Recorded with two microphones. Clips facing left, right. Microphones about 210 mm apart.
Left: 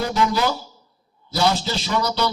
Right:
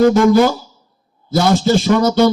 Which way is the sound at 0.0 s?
50° right (ahead or behind).